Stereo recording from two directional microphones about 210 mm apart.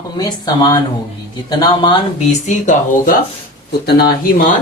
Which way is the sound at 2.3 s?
35° left (ahead or behind).